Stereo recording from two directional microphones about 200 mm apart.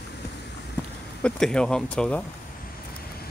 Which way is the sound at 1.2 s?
5° left (ahead or behind).